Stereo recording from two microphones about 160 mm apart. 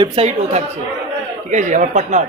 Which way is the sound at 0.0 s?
35° right (ahead or behind).